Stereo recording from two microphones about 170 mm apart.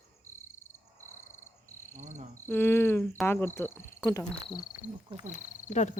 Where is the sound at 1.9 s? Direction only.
45° right (ahead or behind).